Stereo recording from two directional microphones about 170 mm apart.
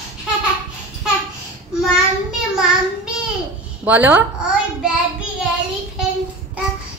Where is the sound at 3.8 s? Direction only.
10° right (ahead or behind).